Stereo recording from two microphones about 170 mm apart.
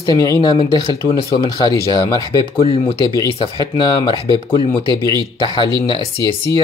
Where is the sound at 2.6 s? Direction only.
35° left (ahead or behind).